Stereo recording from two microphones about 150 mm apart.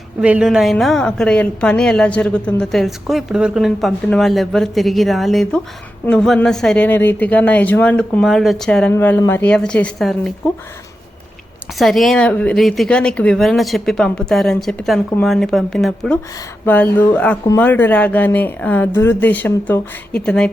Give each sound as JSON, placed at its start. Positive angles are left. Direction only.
{"t": 0.2, "sound": "a woman's voice", "side_deg": -5}
{"t": 11.8, "sound": "a woman's voice", "side_deg": 0}